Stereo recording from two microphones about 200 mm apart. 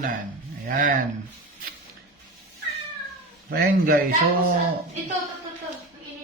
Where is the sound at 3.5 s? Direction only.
50° right (ahead or behind).